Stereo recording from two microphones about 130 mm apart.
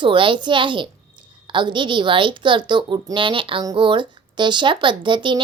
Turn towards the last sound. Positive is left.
turn(degrees=-35)  # may be behind; listen again after turning